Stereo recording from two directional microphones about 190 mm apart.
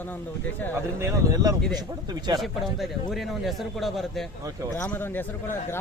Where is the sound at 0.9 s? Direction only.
20° right (ahead or behind).